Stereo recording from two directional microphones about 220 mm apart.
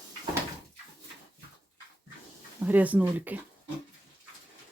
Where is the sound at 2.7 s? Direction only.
5° right (ahead or behind).